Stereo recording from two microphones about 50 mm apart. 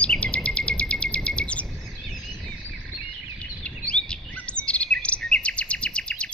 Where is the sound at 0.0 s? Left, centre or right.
Left.